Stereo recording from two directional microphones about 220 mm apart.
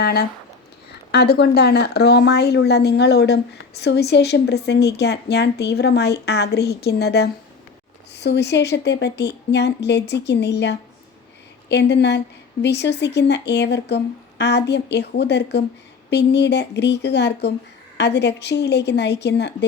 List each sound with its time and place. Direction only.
0.0 s speech: 45° left (ahead or behind)